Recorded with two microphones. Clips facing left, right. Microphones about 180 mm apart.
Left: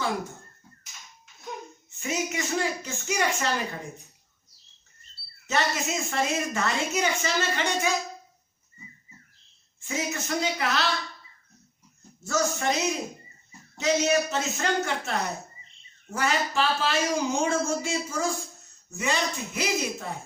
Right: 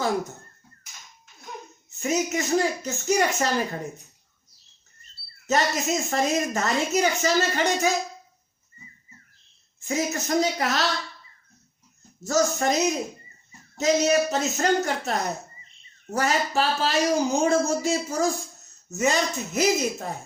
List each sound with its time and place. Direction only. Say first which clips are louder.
1.9 s a woman's voice: right 5 dB; 40° right (ahead or behind)
5.5 s a woman's voice: right 4 dB; 40° right (ahead or behind)
9.8 s a woman's voice: right 5 dB; 40° right (ahead or behind)
12.2 s a woman's voice: right 4 dB; 40° right (ahead or behind)